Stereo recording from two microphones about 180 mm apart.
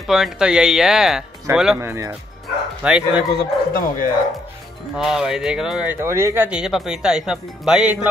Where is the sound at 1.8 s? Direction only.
15° right (ahead or behind).